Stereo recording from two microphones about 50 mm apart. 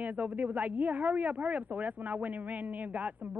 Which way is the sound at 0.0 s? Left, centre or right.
Right.